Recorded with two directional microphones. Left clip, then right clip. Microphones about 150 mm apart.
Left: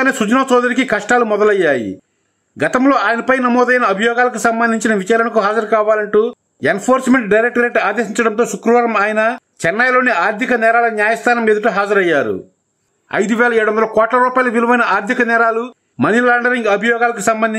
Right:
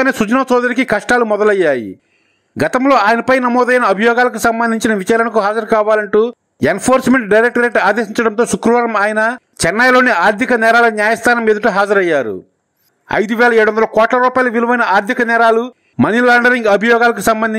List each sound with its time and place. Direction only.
0.0 s a man's voice: 40° right (ahead or behind)